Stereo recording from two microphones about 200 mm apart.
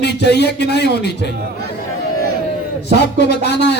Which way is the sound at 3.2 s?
55° left (ahead or behind).